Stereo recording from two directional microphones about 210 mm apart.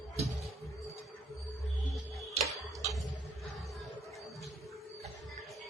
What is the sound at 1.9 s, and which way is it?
Music, centre (ahead or behind).